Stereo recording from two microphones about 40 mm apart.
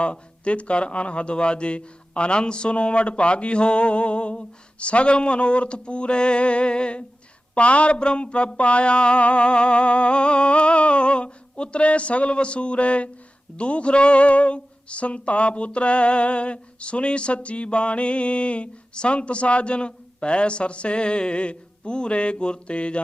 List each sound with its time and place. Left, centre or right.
0.0 s speech: left